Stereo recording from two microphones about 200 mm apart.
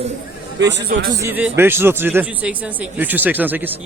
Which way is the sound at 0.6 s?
60° right (ahead or behind).